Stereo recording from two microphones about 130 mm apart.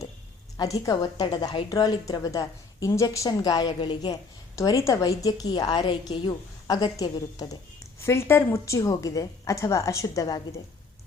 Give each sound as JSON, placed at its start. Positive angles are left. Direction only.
{"t": 0.5, "sound": "a woman's voice", "side_deg": 25}